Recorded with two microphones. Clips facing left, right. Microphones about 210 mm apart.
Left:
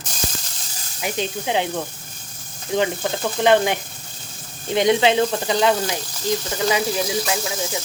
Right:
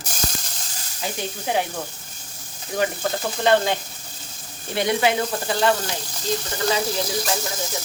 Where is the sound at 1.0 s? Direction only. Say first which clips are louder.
Left 4 dB; 20° left (ahead or behind).